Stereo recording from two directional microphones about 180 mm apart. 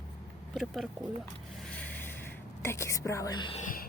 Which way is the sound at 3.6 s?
45° left (ahead or behind).